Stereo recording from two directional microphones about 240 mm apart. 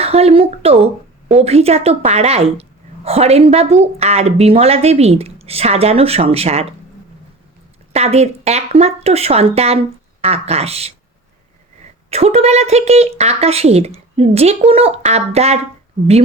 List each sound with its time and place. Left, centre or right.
0.0 s a woman's voice: right
7.9 s a woman's voice: right
12.1 s a woman's voice: right